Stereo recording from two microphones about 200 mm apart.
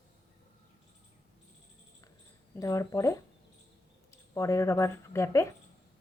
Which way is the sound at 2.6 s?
15° left (ahead or behind).